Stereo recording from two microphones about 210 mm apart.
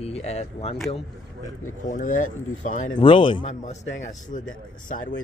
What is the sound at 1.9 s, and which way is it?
Speech, 40° left (ahead or behind).